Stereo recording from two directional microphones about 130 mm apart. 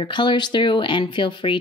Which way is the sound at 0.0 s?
35° left (ahead or behind).